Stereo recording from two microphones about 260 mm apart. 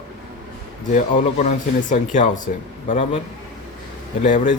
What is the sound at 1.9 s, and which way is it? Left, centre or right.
Speech, left.